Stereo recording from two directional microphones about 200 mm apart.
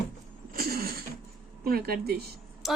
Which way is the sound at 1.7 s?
50° right (ahead or behind).